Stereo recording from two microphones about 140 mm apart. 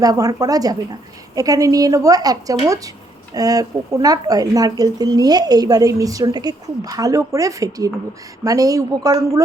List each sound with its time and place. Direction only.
0.0 s speech: 25° right (ahead or behind)